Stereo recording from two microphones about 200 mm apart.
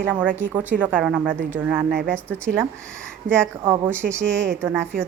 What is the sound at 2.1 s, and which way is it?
Speech, 5° left (ahead or behind).